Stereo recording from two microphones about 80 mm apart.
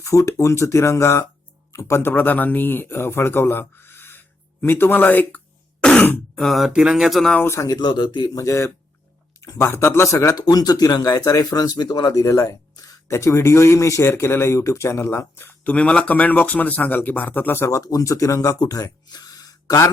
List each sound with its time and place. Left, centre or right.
0.0 s speech: left
5.8 s throat clearing: centre
6.3 s speech: centre
7.4 s speech: left
7.7 s a man's voice: left
8.4 s speech: left
10.4 s speech: left
15.6 s speech: centre; by 18.5 s left
18.6 s speech: left